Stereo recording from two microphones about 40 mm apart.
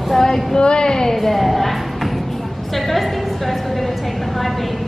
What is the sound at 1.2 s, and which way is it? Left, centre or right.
A woman's voice, centre.